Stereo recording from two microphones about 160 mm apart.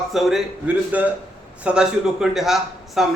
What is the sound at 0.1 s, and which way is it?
A man's voice, centre (ahead or behind).